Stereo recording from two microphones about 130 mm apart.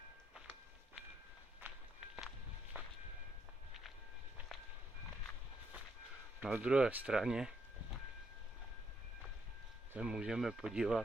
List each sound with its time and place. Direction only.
1.6 s walk: 15° right (ahead or behind)
2.1 s walk: centre (ahead or behind)
6.4 s speech: 10° right (ahead or behind)
9.9 s speech: 5° right (ahead or behind)